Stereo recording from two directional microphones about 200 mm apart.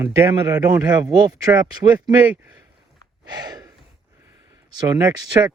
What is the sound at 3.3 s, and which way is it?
Gasp, 20° right (ahead or behind).